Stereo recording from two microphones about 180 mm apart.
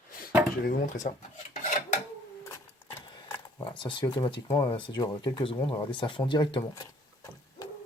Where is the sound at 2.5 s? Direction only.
15° left (ahead or behind).